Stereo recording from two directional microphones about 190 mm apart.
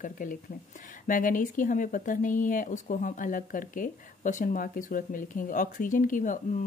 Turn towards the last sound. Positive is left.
turn(degrees=45)  # may be behind; listen again after turning